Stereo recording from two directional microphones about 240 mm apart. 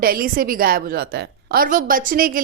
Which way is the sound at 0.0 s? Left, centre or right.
Right.